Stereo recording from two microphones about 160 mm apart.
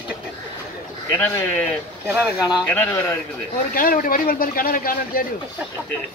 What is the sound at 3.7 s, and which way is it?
A man's voice, 60° left (ahead or behind).